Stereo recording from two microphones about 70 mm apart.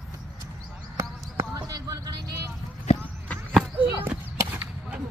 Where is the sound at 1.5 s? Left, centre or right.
Right.